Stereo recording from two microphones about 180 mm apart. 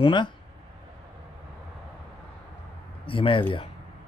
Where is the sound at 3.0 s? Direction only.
30° left (ahead or behind).